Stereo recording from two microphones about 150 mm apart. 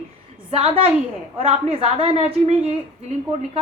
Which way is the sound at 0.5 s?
40° right (ahead or behind).